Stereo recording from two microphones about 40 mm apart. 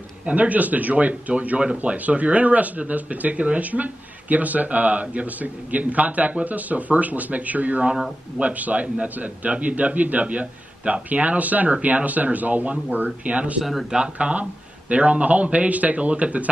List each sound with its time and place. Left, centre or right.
0.2 s speech: right
13.6 s speech: centre
14.1 s speech: right